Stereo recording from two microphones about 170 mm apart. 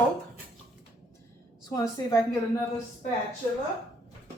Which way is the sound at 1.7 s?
20° left (ahead or behind).